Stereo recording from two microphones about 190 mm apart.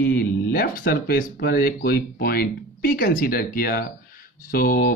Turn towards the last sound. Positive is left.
turn(degrees=50)  # may be behind; listen again after turning